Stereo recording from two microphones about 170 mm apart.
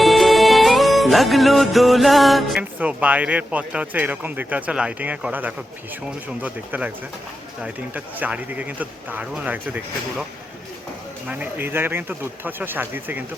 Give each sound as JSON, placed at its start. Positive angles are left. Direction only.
{"t": 0.0, "sound": "music", "side_deg": 0}
{"t": 2.7, "sound": "speech", "side_deg": -10}
{"t": 11.3, "sound": "speech", "side_deg": -10}